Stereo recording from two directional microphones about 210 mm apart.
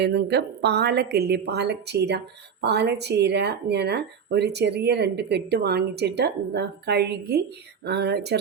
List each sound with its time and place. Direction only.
0.0 s a woman's voice: 55° right (ahead or behind)